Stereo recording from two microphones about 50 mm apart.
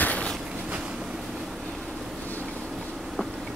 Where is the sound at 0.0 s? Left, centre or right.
Left.